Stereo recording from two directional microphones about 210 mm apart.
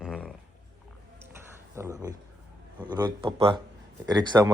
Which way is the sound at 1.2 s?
10° right (ahead or behind).